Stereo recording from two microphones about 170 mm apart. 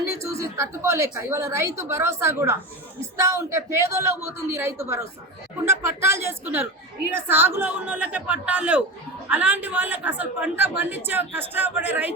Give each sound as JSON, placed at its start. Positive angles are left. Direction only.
{"t": 0.2, "sound": "a woman's voice", "side_deg": -15}